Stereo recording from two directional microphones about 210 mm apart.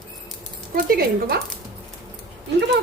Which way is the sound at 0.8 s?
45° right (ahead or behind).